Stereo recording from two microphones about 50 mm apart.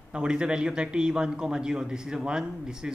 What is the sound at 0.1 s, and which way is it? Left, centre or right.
A man's voice, centre.